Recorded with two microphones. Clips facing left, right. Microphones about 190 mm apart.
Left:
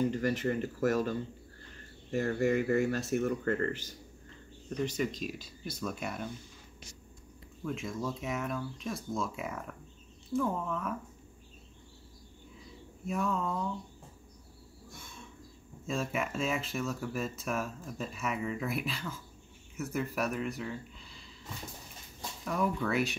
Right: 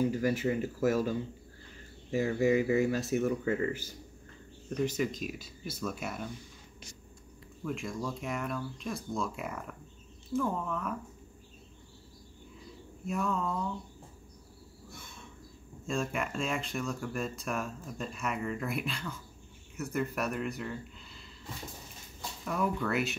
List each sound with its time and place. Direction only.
0.0 s speech: 5° right (ahead or behind)
7.6 s speech: centre (ahead or behind)
13.0 s speech: centre (ahead or behind)
15.9 s speech: 5° left (ahead or behind)
22.4 s speech: centre (ahead or behind)